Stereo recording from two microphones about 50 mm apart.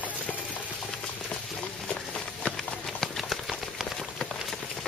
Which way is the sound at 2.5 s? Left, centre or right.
Centre.